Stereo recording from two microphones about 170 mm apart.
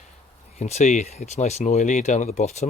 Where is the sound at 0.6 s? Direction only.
40° left (ahead or behind).